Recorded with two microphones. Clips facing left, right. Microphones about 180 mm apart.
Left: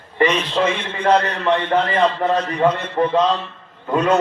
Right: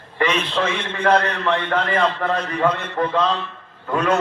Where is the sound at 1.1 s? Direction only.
15° left (ahead or behind).